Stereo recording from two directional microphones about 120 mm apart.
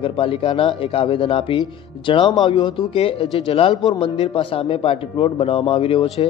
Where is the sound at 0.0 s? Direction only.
50° left (ahead or behind).